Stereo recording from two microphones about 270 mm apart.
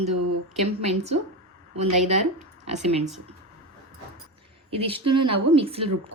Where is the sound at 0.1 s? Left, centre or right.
Right.